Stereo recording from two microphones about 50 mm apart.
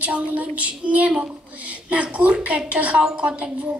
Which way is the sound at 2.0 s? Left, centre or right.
Right.